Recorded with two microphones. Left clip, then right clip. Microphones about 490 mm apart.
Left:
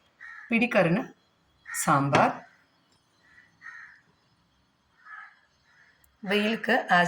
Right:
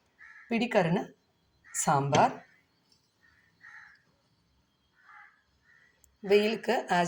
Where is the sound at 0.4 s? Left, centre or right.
Right.